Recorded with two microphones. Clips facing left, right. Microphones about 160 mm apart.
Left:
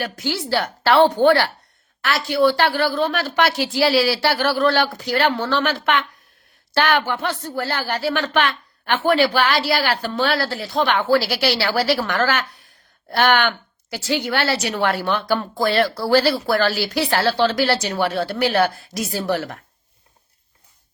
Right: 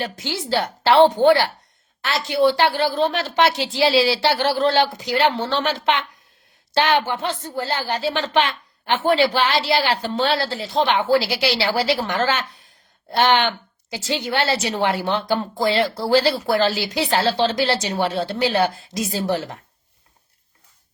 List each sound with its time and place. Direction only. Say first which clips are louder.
0.0 s a woman's voice: left 2 dB; 20° right (ahead or behind)